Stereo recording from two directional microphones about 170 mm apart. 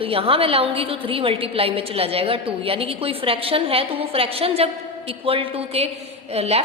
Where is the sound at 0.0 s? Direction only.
35° right (ahead or behind).